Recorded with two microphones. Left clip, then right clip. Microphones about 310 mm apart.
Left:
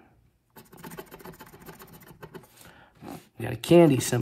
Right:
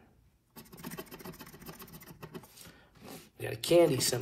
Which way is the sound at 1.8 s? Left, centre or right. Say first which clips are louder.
Left 3 dB; centre.